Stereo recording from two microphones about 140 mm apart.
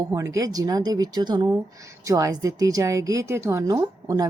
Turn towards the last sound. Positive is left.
turn(degrees=-25)  # may be behind; listen again after turning